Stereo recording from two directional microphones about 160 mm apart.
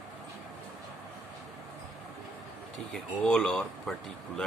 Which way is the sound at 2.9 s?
5° left (ahead or behind).